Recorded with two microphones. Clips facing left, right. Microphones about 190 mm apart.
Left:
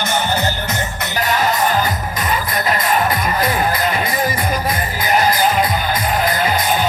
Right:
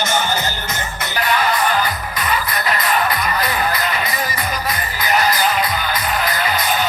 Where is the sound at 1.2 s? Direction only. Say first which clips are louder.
Left 1 dB; 40° left (ahead or behind).